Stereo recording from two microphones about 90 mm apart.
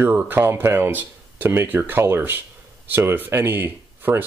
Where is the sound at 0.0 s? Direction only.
20° right (ahead or behind).